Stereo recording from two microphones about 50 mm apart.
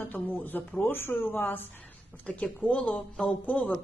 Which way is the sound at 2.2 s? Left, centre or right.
Left.